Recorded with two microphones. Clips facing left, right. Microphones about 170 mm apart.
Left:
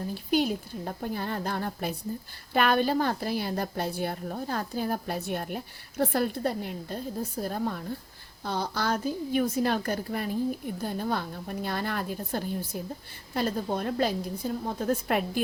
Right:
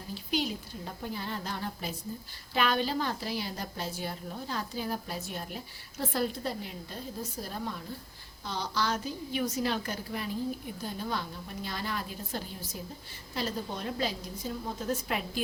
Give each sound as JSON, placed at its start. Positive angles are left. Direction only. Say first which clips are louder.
{"t": 0.1, "sound": "a woman's voice", "louder": "left 5 dB", "side_deg": 50}